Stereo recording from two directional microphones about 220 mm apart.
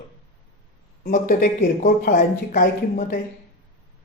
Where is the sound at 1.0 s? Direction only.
35° left (ahead or behind).